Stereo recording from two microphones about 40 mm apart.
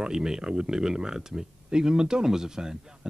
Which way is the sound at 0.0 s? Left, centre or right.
Centre.